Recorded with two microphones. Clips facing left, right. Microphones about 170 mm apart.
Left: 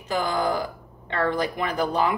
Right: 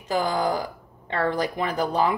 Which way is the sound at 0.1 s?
35° right (ahead or behind).